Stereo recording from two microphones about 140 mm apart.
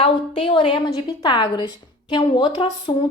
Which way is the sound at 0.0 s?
40° left (ahead or behind).